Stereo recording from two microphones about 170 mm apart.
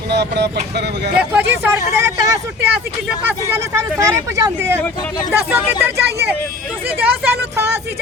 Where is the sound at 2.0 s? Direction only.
20° right (ahead or behind).